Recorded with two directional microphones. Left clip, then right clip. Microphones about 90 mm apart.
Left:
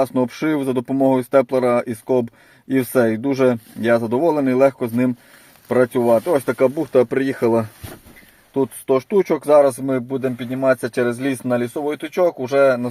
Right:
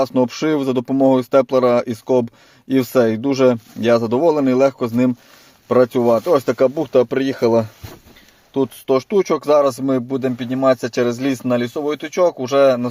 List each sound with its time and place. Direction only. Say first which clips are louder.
0.0 s speech: right 2 dB; 30° right (ahead or behind)
6.3 s speech: right 2 dB; 25° right (ahead or behind); by 7.7 s 5° right (ahead or behind)
8.5 s speech: right 1 dB; 15° right (ahead or behind)
9.6 s speech: left 1 dB; 25° right (ahead or behind)
9.9 s speech: right 2 dB; 40° right (ahead or behind)
11.0 s speech: right 2 dB; 35° right (ahead or behind)
12.1 s speech: right 2 dB; 65° right (ahead or behind)